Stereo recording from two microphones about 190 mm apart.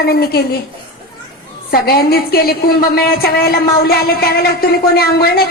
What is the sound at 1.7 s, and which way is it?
A woman's voice, 55° left (ahead or behind).